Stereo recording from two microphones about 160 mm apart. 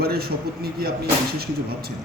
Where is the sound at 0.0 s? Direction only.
75° right (ahead or behind).